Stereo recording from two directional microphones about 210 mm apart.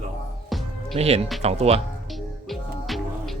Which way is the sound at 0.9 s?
30° right (ahead or behind).